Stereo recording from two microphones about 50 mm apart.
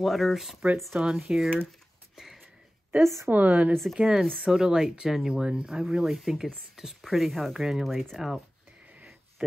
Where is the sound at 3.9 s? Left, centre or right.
Centre.